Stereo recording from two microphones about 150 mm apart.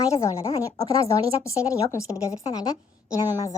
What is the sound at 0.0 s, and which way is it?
A woman's voice, 20° left (ahead or behind).